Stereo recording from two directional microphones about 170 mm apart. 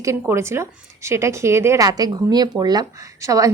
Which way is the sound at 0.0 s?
15° right (ahead or behind).